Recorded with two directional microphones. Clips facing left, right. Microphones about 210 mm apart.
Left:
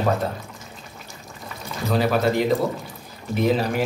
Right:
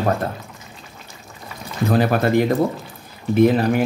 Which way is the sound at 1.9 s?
55° right (ahead or behind).